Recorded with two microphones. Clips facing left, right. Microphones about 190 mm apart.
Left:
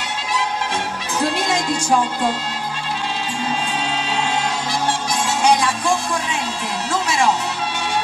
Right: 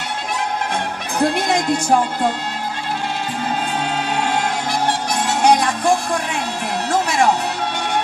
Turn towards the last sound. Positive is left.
turn(degrees=-60)  # may be behind; listen again after turning